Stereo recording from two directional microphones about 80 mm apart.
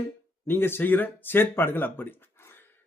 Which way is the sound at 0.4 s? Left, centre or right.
Left.